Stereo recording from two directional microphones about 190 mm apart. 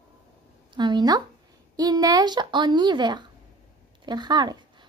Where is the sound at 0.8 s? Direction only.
20° right (ahead or behind).